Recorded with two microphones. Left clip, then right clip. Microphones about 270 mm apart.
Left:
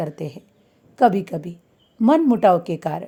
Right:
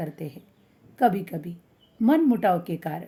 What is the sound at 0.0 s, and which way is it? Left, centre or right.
A woman's voice, left.